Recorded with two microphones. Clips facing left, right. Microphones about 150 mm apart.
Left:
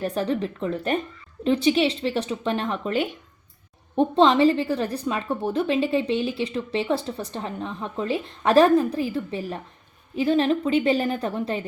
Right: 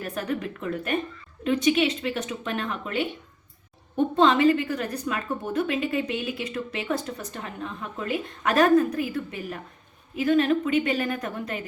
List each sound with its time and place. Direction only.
0.0 s a woman's voice: 30° left (ahead or behind)